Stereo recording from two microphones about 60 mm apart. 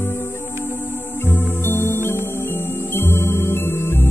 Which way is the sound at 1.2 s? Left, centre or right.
Left.